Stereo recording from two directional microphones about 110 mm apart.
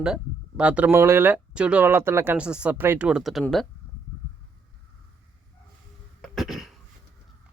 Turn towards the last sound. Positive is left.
turn(degrees=0)  # may be behind; listen again after turning